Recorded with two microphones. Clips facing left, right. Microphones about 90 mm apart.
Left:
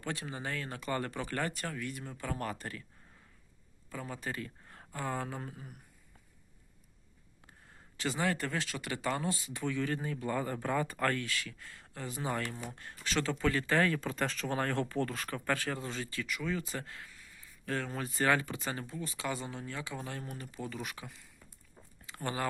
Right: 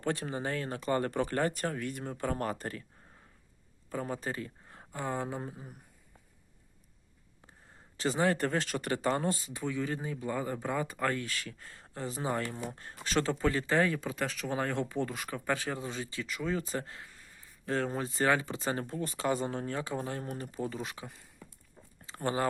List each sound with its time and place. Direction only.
0.0 s speech: 40° right (ahead or behind)
3.8 s speech: 35° right (ahead or behind)
7.9 s speech: 35° right (ahead or behind)
9.8 s speech: 15° right (ahead or behind)
11.3 s speech: 35° right (ahead or behind)
13.9 s speech: 10° right (ahead or behind)
18.5 s speech: 30° right (ahead or behind)
22.0 s a sound: 30° right (ahead or behind)